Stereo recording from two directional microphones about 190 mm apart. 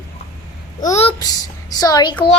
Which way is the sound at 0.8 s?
35° left (ahead or behind).